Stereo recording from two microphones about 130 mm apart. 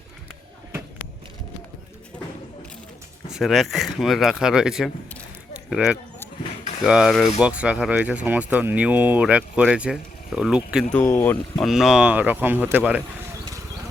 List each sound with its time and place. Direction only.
3.2 s speech: centre (ahead or behind)
11.0 s speech: 15° left (ahead or behind)
11.6 s speech: centre (ahead or behind)